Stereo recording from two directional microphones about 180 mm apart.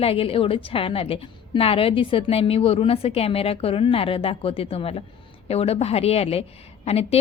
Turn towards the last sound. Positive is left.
turn(degrees=35)  # may be behind; listen again after turning